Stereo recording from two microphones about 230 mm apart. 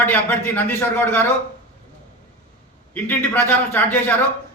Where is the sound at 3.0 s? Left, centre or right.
Centre.